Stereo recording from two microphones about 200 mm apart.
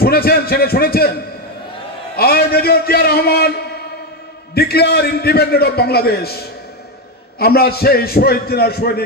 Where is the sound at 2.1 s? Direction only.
50° left (ahead or behind).